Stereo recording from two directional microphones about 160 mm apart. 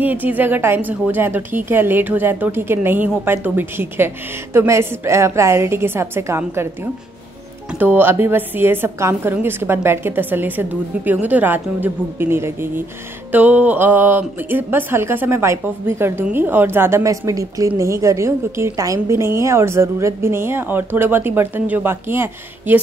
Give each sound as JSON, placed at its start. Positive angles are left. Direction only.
{"t": 0.0, "sound": "speech", "side_deg": -10}